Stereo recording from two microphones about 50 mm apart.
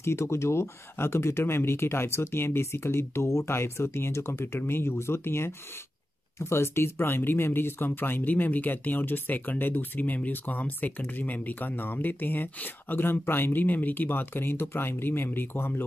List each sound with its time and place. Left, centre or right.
0.0 s speech: left